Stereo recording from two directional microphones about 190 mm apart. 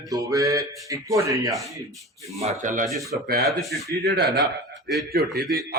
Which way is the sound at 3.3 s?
55° right (ahead or behind).